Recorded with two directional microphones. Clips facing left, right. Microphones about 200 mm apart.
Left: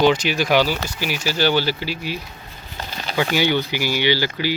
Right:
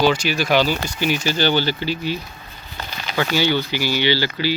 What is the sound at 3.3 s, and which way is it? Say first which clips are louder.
Speech: right 1 dB; 15° left (ahead or behind).